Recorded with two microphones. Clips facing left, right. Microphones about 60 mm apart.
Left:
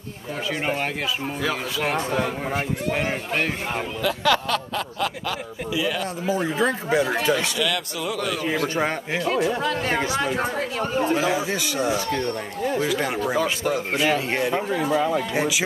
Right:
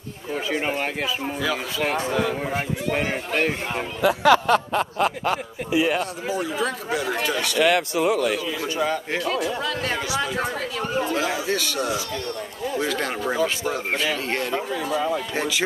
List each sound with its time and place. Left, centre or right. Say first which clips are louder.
0.5 s speech: even; centre
2.9 s speech: right 2 dB; centre
4.0 s speech: right 5 dB; right
6.4 s speech: left 3 dB; left
7.5 s speech: right 6 dB; right
9.2 s speech: left 3 dB; left; by 14.6 s centre
14.7 s speech: left 2 dB; left
15.3 s speech: left 2 dB; centre